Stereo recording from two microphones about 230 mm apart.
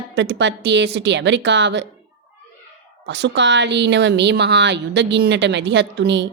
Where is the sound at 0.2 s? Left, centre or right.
Right.